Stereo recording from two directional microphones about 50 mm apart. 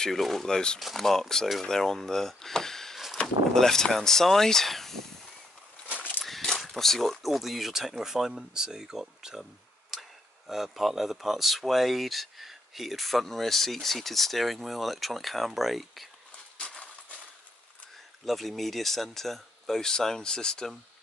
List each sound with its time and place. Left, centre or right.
0.0 s speech: centre
0.7 s speech: centre
6.2 s speech: centre
16.6 s a sound: left
18.2 s speech: centre